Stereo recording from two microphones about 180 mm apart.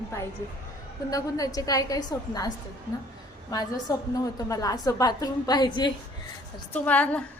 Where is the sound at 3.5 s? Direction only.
20° left (ahead or behind).